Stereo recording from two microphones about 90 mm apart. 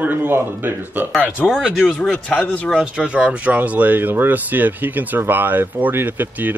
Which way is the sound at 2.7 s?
10° right (ahead or behind).